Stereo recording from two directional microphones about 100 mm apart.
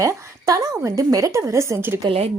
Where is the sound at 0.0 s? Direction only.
35° right (ahead or behind).